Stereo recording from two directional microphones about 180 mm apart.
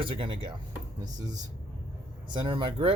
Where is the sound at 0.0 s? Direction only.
30° right (ahead or behind).